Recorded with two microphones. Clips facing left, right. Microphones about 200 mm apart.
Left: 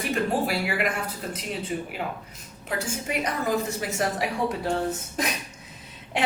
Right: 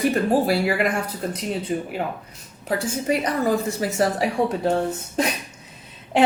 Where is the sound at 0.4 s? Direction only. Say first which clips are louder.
Right 6 dB; 35° right (ahead or behind).